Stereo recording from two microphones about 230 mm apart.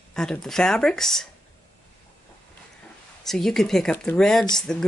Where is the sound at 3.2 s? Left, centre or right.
Centre.